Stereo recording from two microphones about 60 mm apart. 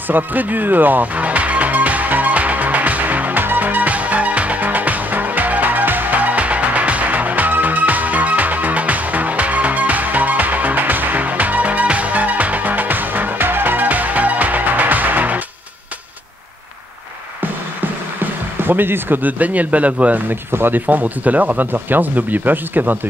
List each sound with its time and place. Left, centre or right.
0.1 s music: right
18.2 s speech: right
20.5 s speech: right